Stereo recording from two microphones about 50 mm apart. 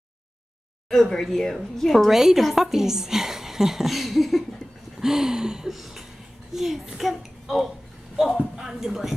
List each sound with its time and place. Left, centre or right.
0.8 s speech: centre
2.0 s a woman's voice: centre
5.7 s a sound: centre
6.5 s a child's voice: centre